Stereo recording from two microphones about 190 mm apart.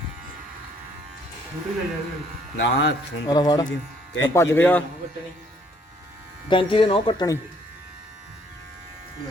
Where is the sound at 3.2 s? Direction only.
20° left (ahead or behind).